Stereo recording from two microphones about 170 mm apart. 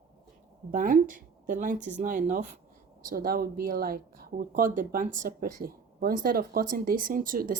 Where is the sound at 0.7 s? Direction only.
50° right (ahead or behind).